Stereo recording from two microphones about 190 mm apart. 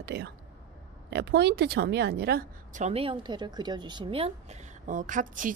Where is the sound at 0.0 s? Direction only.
60° right (ahead or behind).